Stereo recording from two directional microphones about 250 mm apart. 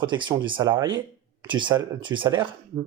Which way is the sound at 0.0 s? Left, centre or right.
Centre.